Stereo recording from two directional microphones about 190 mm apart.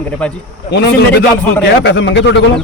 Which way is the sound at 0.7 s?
65° left (ahead or behind).